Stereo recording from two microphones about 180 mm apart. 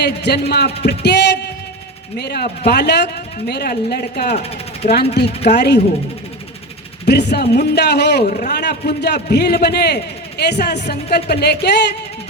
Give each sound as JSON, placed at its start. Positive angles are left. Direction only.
{"t": 0.0, "sound": "a man's voice", "side_deg": 65}
{"t": 4.8, "sound": "speech", "side_deg": 50}
{"t": 5.5, "sound": "speech", "side_deg": 65}
{"t": 7.1, "sound": "a man's voice", "side_deg": 65}